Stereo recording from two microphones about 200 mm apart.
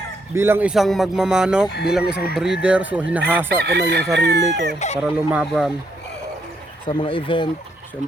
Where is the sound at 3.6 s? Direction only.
55° right (ahead or behind).